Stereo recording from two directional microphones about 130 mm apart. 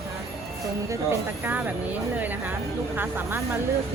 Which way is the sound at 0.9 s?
20° right (ahead or behind).